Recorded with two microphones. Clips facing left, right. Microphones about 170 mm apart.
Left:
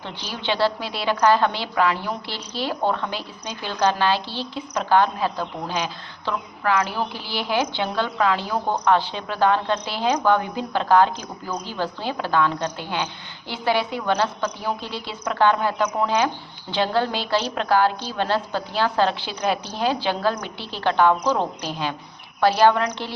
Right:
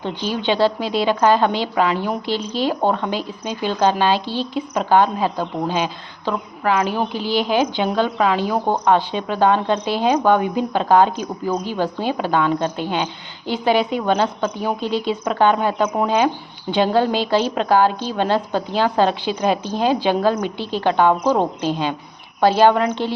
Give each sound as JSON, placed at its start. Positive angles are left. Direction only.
{"t": 0.4, "sound": "a woman's voice", "side_deg": -15}
{"t": 21.1, "sound": "a woman's voice", "side_deg": -50}
{"t": 21.6, "sound": "a woman's voice", "side_deg": -20}